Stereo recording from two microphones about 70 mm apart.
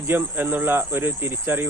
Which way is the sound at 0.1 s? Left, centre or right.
Right.